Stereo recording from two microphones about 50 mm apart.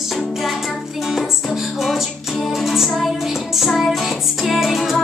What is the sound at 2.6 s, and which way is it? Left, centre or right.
Music, centre.